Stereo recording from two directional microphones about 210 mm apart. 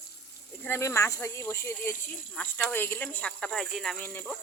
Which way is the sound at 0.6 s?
10° left (ahead or behind).